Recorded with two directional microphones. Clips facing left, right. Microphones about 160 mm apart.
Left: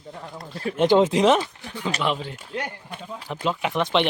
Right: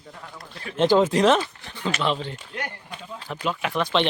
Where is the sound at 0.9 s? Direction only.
20° left (ahead or behind).